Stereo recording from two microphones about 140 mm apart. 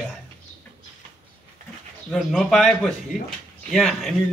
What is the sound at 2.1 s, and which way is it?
A man's voice, 5° left (ahead or behind).